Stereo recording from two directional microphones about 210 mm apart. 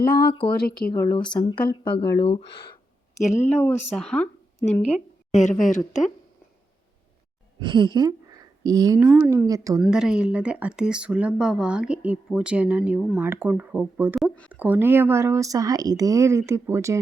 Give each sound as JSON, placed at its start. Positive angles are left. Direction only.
{"t": 0.3, "sound": "speech", "side_deg": 25}
{"t": 3.2, "sound": "speech", "side_deg": 35}
{"t": 3.9, "sound": "speech", "side_deg": 5}
{"t": 4.6, "sound": "speech", "side_deg": 30}
{"t": 7.6, "sound": "speech", "side_deg": -20}
{"t": 9.0, "sound": "speech", "side_deg": -5}
{"t": 9.8, "sound": "speech", "side_deg": -5}
{"t": 14.3, "sound": "speech", "side_deg": 5}
{"t": 14.5, "sound": "speech", "side_deg": -10}